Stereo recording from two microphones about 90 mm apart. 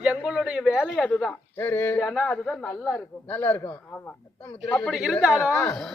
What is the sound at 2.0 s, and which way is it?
A man's voice, 5° left (ahead or behind).